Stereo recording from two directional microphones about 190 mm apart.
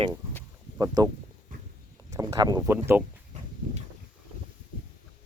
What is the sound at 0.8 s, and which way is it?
Speech, 20° right (ahead or behind).